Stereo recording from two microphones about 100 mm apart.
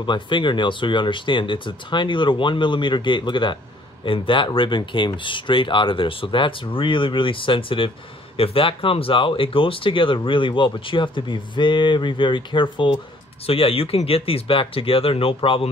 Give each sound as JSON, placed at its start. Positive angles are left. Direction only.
{"t": 0.0, "sound": "speech", "side_deg": 55}
{"t": 13.5, "sound": "speech", "side_deg": 70}